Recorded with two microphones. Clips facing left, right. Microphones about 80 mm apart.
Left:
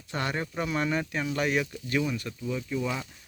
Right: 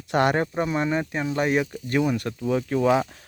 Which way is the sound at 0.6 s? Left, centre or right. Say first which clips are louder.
Right 5 dB; right.